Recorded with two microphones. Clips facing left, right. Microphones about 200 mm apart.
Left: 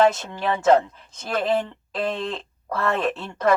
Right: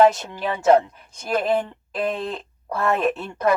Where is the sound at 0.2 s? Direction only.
10° right (ahead or behind).